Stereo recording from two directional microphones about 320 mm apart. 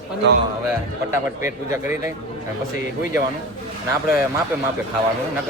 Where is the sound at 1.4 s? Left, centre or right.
Centre.